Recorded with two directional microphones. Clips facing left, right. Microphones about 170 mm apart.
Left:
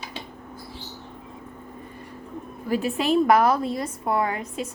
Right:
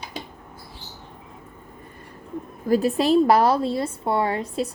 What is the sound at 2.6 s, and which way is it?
A woman's voice, 40° right (ahead or behind).